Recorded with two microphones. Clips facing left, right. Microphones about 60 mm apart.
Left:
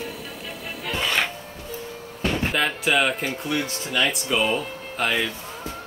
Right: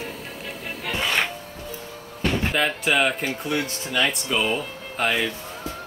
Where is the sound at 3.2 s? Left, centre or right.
Centre.